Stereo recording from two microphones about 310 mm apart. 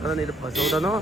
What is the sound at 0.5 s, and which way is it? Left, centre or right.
Speech, centre.